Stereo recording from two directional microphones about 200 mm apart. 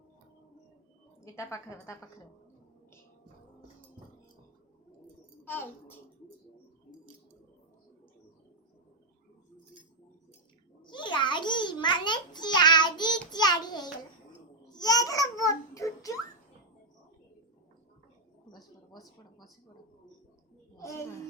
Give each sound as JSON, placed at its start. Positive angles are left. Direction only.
{"t": 1.2, "sound": "a woman's voice", "side_deg": 15}
{"t": 5.5, "sound": "a child's voice", "side_deg": 10}
{"t": 10.8, "sound": "a sound", "side_deg": 20}
{"t": 13.3, "sound": "child singing", "side_deg": 20}
{"t": 14.7, "sound": "babbling", "side_deg": 20}
{"t": 20.7, "sound": "a woman's voice", "side_deg": 15}